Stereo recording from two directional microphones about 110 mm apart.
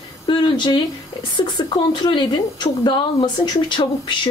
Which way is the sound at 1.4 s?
40° left (ahead or behind).